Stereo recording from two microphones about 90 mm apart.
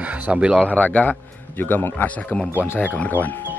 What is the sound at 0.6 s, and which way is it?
A man's voice, 15° left (ahead or behind).